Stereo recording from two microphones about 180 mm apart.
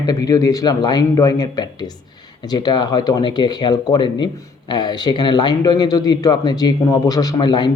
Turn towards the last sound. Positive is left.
turn(degrees=25)  # may be behind; listen again after turning